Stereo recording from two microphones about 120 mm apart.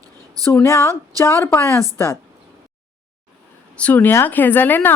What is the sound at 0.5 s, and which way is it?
Speech, 25° left (ahead or behind).